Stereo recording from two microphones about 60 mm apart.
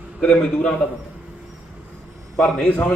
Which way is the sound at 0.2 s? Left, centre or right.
Centre.